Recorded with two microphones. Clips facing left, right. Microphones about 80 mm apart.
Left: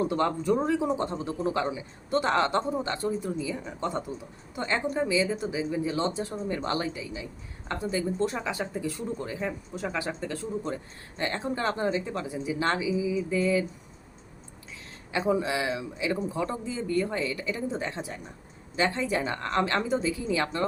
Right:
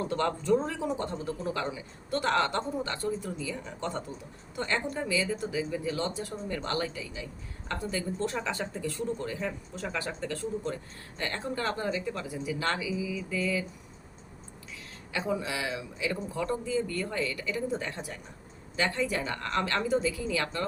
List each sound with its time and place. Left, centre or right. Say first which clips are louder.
0.0 s speech: left 4 dB; centre
15.1 s speech: left 5 dB; left